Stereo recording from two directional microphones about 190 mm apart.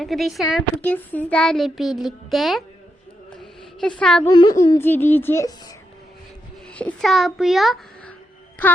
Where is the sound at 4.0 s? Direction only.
5° left (ahead or behind).